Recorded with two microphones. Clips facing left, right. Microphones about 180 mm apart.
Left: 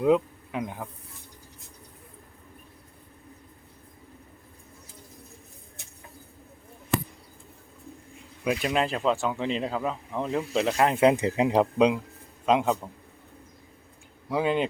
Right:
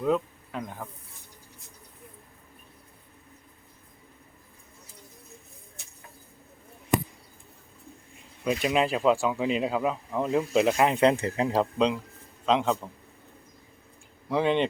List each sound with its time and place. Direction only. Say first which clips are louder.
0.0 s speech: left 4 dB; 15° left (ahead or behind)
8.6 s speech: right 3 dB; 5° right (ahead or behind)
10.9 s speech: left 1 dB; 5° left (ahead or behind)
11.2 s speech: left 3 dB; 20° left (ahead or behind)
14.3 s speech: right 1 dB; 5° left (ahead or behind)